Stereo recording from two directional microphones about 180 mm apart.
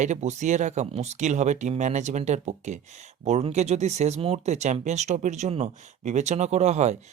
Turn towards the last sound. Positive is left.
turn(degrees=-40)  # may be behind; listen again after turning